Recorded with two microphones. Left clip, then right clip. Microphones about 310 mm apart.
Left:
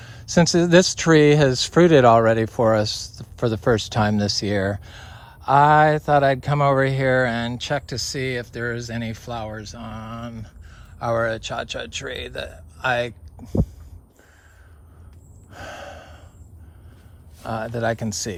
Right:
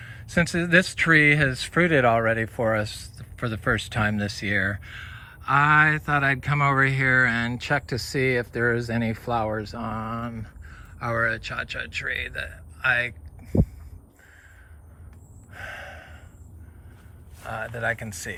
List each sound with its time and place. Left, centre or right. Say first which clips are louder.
0.0 s speech: left 5 dB; centre
15.5 s gasp: left 2 dB; centre
17.9 s speech: left 6 dB; centre